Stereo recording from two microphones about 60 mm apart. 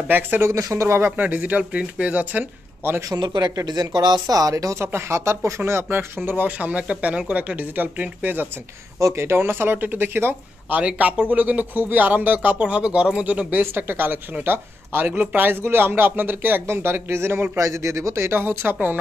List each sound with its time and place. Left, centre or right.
0.4 s speech: right
1.1 s speech: right
3.1 s speech: right
9.1 s speech: right
10.8 s speech: right
13.3 s speech: right
17.6 s speech: right